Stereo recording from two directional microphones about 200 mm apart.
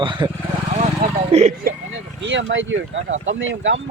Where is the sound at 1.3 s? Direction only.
30° right (ahead or behind).